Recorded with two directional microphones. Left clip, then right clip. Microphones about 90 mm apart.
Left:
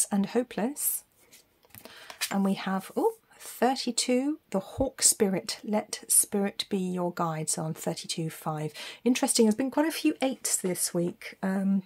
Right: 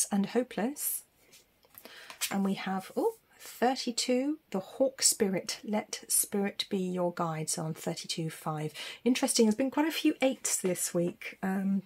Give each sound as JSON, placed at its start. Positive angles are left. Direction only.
{"t": 0.0, "sound": "speech", "side_deg": 35}
{"t": 2.0, "sound": "a sound", "side_deg": 90}
{"t": 2.3, "sound": "speech", "side_deg": 50}
{"t": 2.8, "sound": "speech", "side_deg": 70}
{"t": 3.5, "sound": "speech", "side_deg": 55}